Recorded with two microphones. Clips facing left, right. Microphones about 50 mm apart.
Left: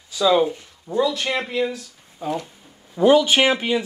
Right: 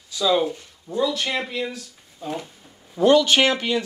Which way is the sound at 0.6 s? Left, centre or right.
Centre.